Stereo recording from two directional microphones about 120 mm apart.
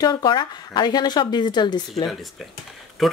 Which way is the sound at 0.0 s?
35° left (ahead or behind).